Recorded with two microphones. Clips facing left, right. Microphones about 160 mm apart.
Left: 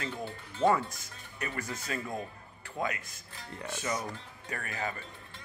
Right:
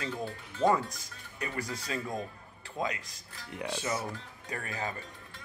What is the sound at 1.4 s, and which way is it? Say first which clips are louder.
Speech: right 1 dB; 15° right (ahead or behind).